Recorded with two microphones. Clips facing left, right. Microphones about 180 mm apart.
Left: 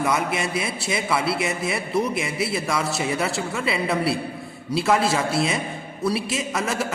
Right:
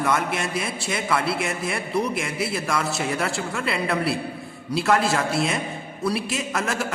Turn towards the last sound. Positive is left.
turn(degrees=0)  # may be behind; listen again after turning